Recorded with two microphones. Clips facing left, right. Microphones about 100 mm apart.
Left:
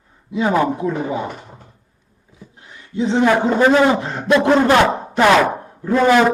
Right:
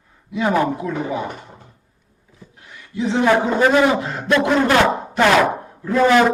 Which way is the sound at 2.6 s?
25° left (ahead or behind).